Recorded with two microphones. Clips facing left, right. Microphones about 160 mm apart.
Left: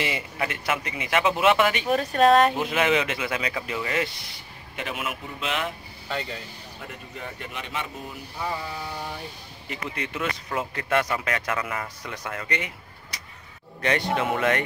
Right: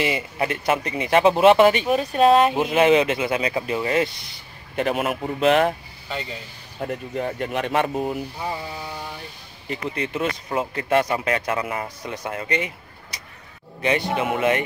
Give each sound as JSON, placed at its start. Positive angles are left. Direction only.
{"t": 0.0, "sound": "speech", "side_deg": -30}
{"t": 1.9, "sound": "a man's voice", "side_deg": -15}
{"t": 2.2, "sound": "speech", "side_deg": -5}
{"t": 2.5, "sound": "speech", "side_deg": -25}
{"t": 4.7, "sound": "a man's voice", "side_deg": -45}
{"t": 6.8, "sound": "speech", "side_deg": -45}
{"t": 9.7, "sound": "speech", "side_deg": -30}
{"t": 13.7, "sound": "a man's voice", "side_deg": -15}